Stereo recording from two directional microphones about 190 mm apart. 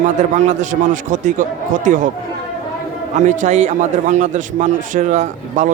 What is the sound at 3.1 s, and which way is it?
A man's voice, 40° right (ahead or behind).